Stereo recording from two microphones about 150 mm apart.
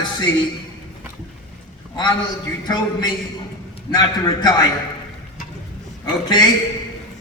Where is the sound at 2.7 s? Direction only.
25° left (ahead or behind).